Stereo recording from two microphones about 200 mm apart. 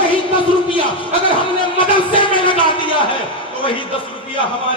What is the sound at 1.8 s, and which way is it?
Music, 25° left (ahead or behind).